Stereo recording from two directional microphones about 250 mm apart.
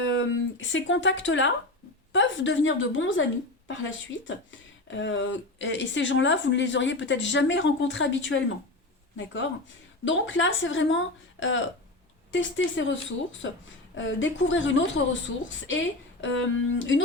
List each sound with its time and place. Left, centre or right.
0.0 s speech: left